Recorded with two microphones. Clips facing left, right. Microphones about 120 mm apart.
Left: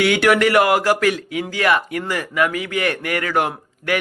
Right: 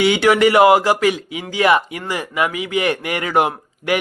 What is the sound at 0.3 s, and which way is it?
A man's voice, 10° right (ahead or behind).